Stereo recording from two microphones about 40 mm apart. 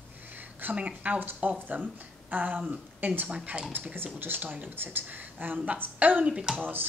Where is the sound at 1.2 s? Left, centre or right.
Right.